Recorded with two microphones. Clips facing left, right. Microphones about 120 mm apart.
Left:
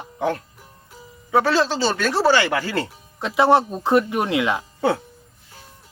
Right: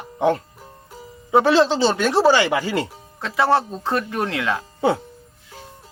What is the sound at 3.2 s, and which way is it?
Speech, 20° left (ahead or behind).